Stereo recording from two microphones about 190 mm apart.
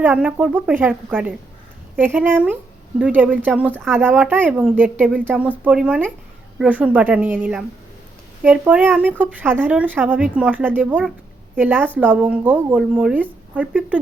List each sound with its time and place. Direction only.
0.0 s speech: 5° right (ahead or behind)